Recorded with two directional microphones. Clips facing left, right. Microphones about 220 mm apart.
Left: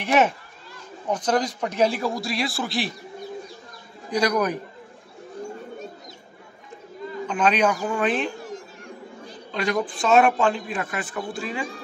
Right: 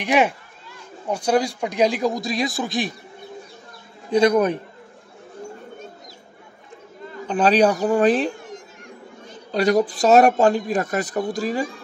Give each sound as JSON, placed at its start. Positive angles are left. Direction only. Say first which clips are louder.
{"t": 0.0, "sound": "speech", "louder": "right 1 dB", "side_deg": -15}
{"t": 4.1, "sound": "a man's voice", "louder": "right 6 dB", "side_deg": -25}
{"t": 7.2, "sound": "speech", "louder": "right 5 dB", "side_deg": -35}
{"t": 8.4, "sound": "a sound", "louder": "left 2 dB", "side_deg": 30}
{"t": 9.5, "sound": "speech", "louder": "right 7 dB", "side_deg": -40}